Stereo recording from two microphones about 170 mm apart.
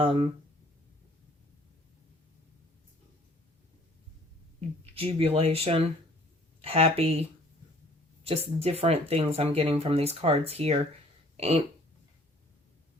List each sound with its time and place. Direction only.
0.0 s speech: 30° right (ahead or behind)
4.9 s speech: 35° right (ahead or behind)
8.5 s speech: 35° right (ahead or behind)